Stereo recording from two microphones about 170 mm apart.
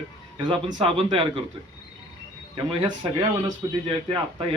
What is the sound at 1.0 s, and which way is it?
Speech, 30° right (ahead or behind).